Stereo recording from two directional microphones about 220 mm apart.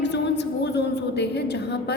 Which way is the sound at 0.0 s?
50° left (ahead or behind).